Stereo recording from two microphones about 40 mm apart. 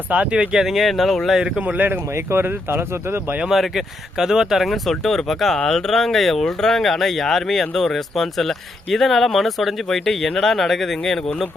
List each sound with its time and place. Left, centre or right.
0.1 s speech: right
0.6 s speech: centre
1.5 s speech: right
2.6 s speech: right
3.5 s speech: centre
4.6 s speech: centre